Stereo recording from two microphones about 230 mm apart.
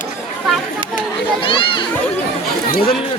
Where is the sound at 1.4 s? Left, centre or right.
Left.